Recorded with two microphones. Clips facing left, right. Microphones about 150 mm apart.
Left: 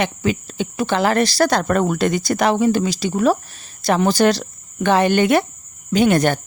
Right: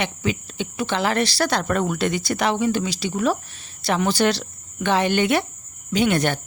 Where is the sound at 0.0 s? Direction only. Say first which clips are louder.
Left 4 dB; 45° left (ahead or behind).